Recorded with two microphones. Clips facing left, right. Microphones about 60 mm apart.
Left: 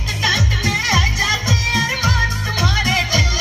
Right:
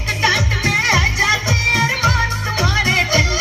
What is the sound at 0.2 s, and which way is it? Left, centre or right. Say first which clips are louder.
Music: right 2 dB; right.